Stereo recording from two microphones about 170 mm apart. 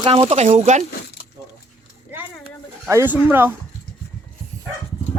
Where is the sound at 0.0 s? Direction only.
30° right (ahead or behind).